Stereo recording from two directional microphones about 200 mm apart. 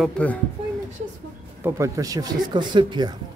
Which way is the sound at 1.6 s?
15° right (ahead or behind).